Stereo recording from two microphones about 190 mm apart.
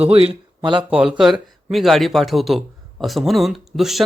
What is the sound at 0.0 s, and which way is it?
Speech, 30° right (ahead or behind).